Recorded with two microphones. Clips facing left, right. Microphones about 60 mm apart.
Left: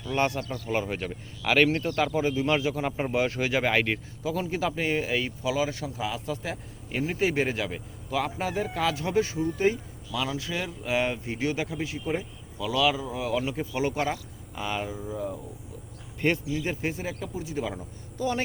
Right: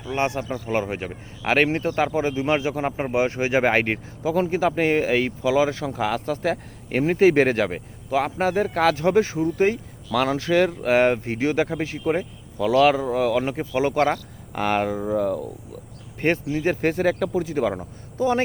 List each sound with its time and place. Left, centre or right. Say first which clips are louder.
0.0 s speech: right 2 dB; centre
0.7 s speech: right 4 dB; right
0.9 s speech: right 3 dB; right
2.5 s speech: right 4 dB; right
3.6 s speech: right 5 dB; right
5.8 s speech: right 7 dB; right
9.6 s speech: right 2 dB; right
14.0 s speech: right 8 dB; right
16.2 s speech: right 5 dB; right
18.2 s speech: right 7 dB; right